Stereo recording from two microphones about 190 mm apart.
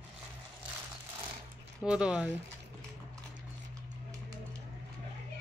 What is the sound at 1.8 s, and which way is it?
Speech, 5° right (ahead or behind).